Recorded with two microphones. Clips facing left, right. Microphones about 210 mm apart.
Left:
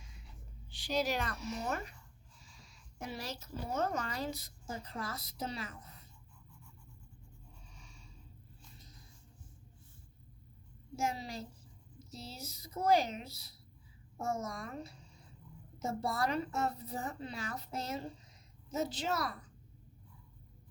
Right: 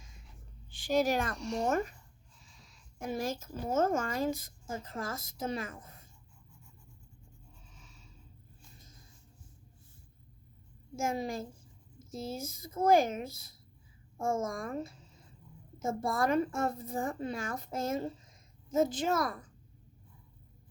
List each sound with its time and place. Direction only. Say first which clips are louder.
0.7 s speech: right 6 dB; 50° right (ahead or behind)
1.4 s speech: right 6 dB; centre (ahead or behind)
1.6 s speech: right 9 dB; 45° right (ahead or behind)
2.3 s snort: even; centre (ahead or behind)
3.0 s speech: right 8 dB; 50° right (ahead or behind)
7.7 s snort: even; centre (ahead or behind)
10.9 s speech: right 4 dB; 50° right (ahead or behind)
14.9 s a sound: even; centre (ahead or behind)
15.8 s a woman's voice: right 4 dB; 50° right (ahead or behind)